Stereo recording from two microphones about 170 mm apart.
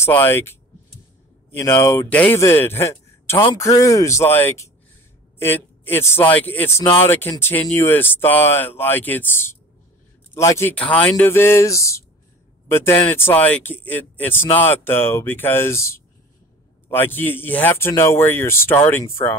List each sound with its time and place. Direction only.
0.0 s a man's voice: 15° left (ahead or behind)